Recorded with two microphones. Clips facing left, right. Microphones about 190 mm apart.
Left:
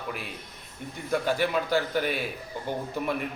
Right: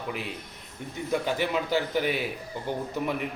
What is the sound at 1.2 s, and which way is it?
Speech, 15° right (ahead or behind).